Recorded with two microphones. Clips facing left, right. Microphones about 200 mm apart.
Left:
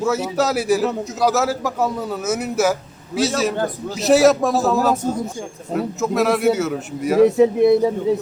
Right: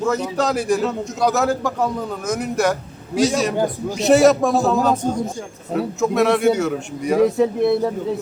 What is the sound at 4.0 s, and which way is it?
A man's voice, centre (ahead or behind).